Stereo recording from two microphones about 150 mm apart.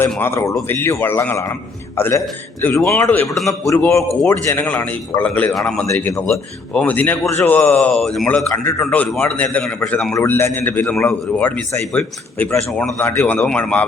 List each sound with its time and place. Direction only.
0.2 s speech: 20° left (ahead or behind)
3.2 s a man's voice: centre (ahead or behind)
3.8 s a man's voice: 20° left (ahead or behind)
10.2 s speech: 15° left (ahead or behind)